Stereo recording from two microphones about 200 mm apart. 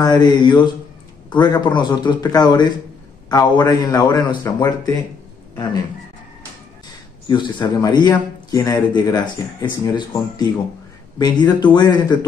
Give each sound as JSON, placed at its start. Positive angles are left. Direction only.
{"t": 0.2, "sound": "speech", "side_deg": 20}
{"t": 7.2, "sound": "speech", "side_deg": 20}